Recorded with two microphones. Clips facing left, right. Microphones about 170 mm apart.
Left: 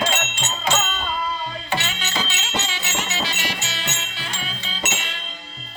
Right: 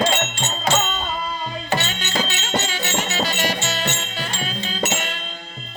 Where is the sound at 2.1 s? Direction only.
45° right (ahead or behind).